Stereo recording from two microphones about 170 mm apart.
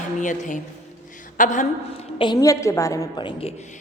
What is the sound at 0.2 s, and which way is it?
A woman's voice, 45° left (ahead or behind).